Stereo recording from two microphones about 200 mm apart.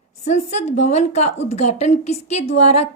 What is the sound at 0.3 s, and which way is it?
A woman's voice, 35° left (ahead or behind).